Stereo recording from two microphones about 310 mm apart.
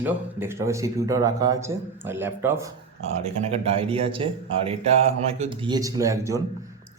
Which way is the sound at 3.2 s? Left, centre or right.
Right.